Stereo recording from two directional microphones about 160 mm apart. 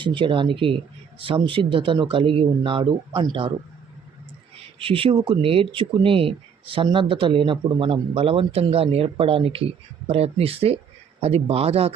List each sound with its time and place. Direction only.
0.0 s speech: 30° right (ahead or behind)
4.8 s speech: 35° right (ahead or behind)